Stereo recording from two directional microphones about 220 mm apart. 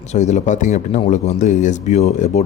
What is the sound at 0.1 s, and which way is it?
Speech, 30° left (ahead or behind).